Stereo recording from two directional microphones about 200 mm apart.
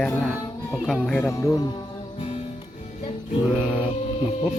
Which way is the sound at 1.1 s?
10° left (ahead or behind).